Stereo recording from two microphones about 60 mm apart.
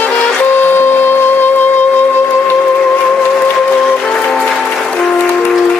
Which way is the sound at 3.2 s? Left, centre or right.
Left.